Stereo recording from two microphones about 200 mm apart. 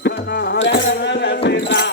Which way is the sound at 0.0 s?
55° left (ahead or behind).